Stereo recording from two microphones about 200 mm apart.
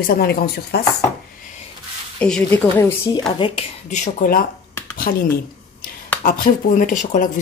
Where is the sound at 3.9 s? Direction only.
40° left (ahead or behind).